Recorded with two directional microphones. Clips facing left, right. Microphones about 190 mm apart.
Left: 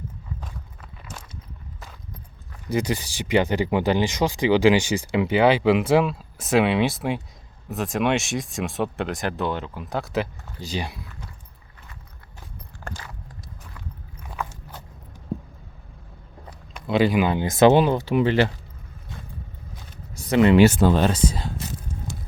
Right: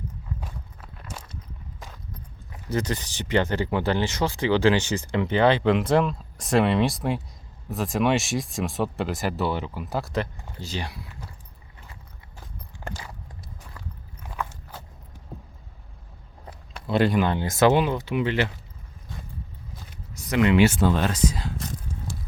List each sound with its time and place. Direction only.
0.4 s walk: 5° right (ahead or behind)
2.6 s speech: 10° left (ahead or behind)
10.6 s speech: 15° left (ahead or behind)
16.8 s speech: centre (ahead or behind); by 17.7 s 20° left (ahead or behind)
17.7 s speech: 35° left (ahead or behind)
20.1 s speech: 30° left (ahead or behind)